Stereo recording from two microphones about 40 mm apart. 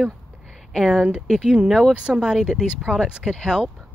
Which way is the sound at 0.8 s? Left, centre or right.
Centre.